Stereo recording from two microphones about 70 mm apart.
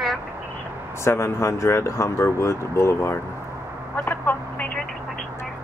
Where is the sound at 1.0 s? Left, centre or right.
Left.